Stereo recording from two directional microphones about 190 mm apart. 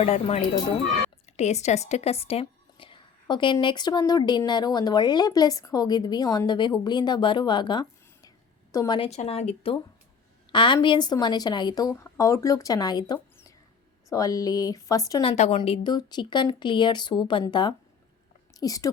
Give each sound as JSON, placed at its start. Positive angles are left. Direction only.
{"t": 0.0, "sound": "a woman's voice", "side_deg": 35}
{"t": 9.0, "sound": "a woman's voice", "side_deg": 35}
{"t": 15.3, "sound": "a woman's voice", "side_deg": 30}